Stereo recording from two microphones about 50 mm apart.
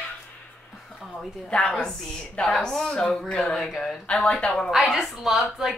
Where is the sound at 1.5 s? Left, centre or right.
Centre.